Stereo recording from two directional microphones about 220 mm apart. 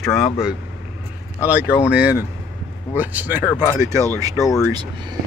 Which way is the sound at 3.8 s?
15° right (ahead or behind).